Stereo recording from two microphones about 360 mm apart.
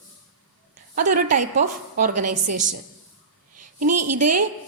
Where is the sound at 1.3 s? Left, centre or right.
Right.